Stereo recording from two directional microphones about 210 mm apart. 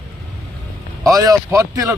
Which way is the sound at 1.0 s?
15° right (ahead or behind).